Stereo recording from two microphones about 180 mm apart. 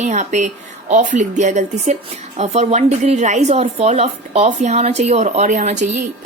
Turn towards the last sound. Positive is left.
turn(degrees=-45)  # may be behind; listen again after turning